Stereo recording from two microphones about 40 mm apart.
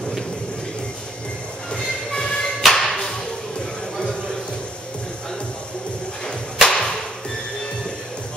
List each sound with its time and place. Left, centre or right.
1.7 s train: centre
2.6 s music: centre
6.2 s music: centre